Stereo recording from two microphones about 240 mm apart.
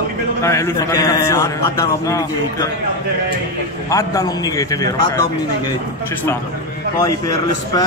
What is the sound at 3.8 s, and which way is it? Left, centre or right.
A man's voice, centre.